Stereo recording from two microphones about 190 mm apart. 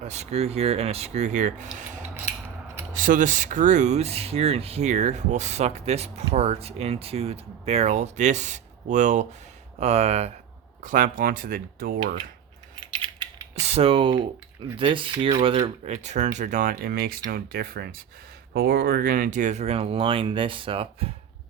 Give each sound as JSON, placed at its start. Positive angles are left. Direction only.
{"t": 0.0, "sound": "speech", "side_deg": -35}
{"t": 1.8, "sound": "cutlery", "side_deg": -40}
{"t": 2.9, "sound": "speech", "side_deg": -45}
{"t": 10.8, "sound": "speech", "side_deg": -45}
{"t": 12.9, "sound": "typing", "side_deg": -25}
{"t": 14.8, "sound": "speech", "side_deg": -25}